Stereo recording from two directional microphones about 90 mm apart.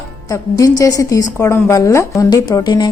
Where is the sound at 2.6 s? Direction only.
50° left (ahead or behind).